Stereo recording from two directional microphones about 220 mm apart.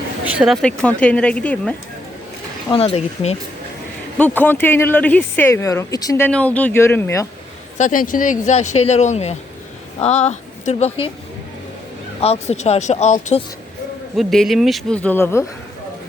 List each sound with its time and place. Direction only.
0.3 s speech: 5° right (ahead or behind)
2.6 s speech: 25° left (ahead or behind)
4.2 s speech: 10° left (ahead or behind)
7.8 s a woman's voice: 35° left (ahead or behind)
12.2 s speech: 30° left (ahead or behind)
14.2 s speech: centre (ahead or behind)